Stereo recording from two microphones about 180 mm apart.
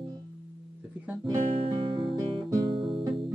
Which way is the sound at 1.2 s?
30° right (ahead or behind).